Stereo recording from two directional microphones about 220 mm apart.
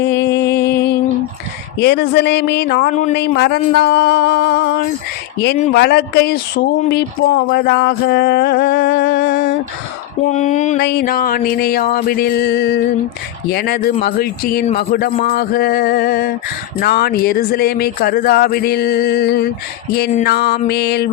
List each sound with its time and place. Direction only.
0.0 s music: 50° left (ahead or behind)
1.8 s speech: 50° left (ahead or behind)
3.2 s speech: 50° left (ahead or behind)
5.7 s speech: 45° left (ahead or behind)
10.2 s a sound: 35° left (ahead or behind)
10.8 s speech: 45° left (ahead or behind)